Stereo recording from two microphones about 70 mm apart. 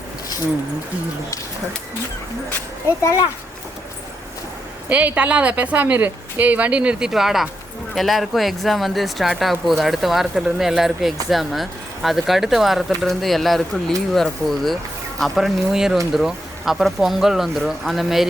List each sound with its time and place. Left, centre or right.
4.9 s a woman's voice: centre
7.1 s speech: centre